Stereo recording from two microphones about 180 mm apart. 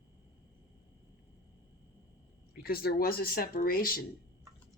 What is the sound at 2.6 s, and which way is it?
Speech, 60° left (ahead or behind).